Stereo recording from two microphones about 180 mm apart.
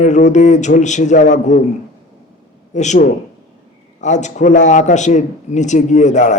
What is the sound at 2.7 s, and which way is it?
A man's voice, 40° left (ahead or behind).